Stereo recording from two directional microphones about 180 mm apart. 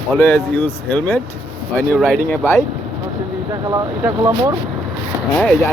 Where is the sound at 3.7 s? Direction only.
20° right (ahead or behind).